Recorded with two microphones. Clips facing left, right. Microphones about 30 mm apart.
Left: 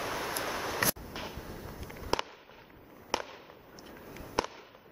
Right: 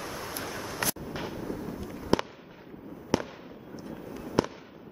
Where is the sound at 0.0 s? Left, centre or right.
Left.